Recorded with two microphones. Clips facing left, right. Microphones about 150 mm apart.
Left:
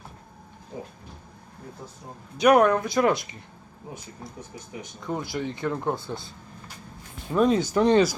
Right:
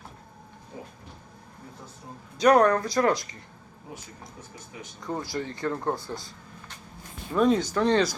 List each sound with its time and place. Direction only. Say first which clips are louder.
2.4 s speech: left 1 dB; 20° left (ahead or behind)
5.0 s speech: left 2 dB; 20° left (ahead or behind)
7.3 s speech: left 1 dB; centre (ahead or behind)
7.7 s speech: left 4 dB; 15° left (ahead or behind)